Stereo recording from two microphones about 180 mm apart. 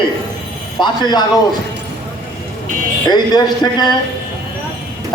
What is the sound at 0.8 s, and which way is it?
Speech, 25° left (ahead or behind).